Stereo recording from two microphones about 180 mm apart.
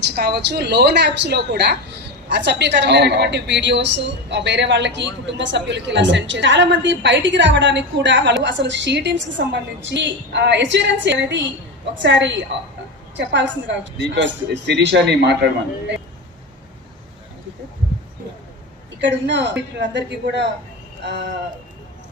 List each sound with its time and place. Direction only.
0.0 s a woman's voice: 65° right (ahead or behind)
19.0 s a woman's voice: 80° right